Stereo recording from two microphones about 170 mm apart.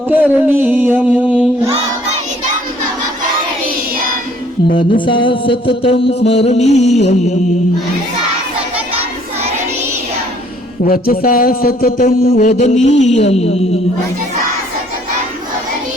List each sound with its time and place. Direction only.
0.1 s a sound: 10° right (ahead or behind)
4.9 s music: 30° left (ahead or behind)
10.8 s a man's voice: 60° left (ahead or behind); by 13.6 s 40° left (ahead or behind)